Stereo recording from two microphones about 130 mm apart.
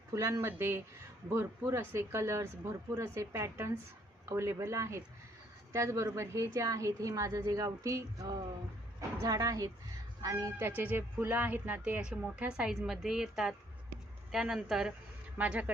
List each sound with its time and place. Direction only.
0.1 s a woman's voice: 25° right (ahead or behind)